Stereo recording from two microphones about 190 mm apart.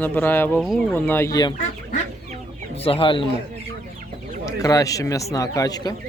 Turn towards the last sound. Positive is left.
turn(degrees=20)  # may be behind; listen again after turning